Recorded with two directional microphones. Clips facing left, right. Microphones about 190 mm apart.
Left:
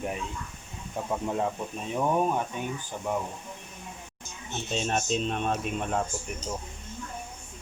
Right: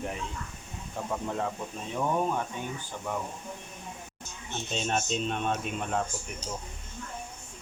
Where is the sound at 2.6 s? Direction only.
15° left (ahead or behind).